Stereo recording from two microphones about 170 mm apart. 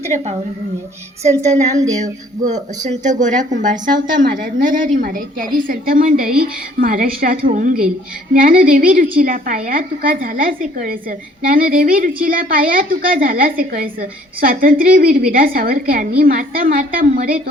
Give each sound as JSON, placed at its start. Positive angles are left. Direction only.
{"t": 1.5, "sound": "a woman's voice", "side_deg": -45}